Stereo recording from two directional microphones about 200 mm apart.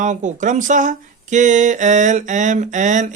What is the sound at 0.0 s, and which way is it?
Speech, 40° right (ahead or behind).